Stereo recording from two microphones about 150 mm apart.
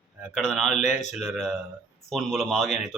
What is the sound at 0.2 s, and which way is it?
Speech, centre (ahead or behind).